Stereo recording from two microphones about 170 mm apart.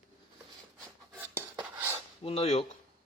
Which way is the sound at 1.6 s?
15° right (ahead or behind).